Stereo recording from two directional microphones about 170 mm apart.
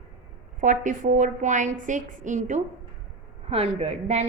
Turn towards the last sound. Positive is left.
turn(degrees=-40)  # may be behind; listen again after turning